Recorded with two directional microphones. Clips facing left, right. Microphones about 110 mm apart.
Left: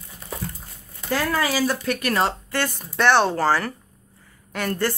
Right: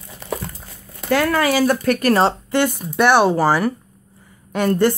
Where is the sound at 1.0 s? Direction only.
70° right (ahead or behind).